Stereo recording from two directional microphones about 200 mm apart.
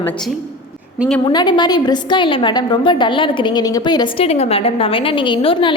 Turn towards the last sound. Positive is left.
turn(degrees=25)  # may be behind; listen again after turning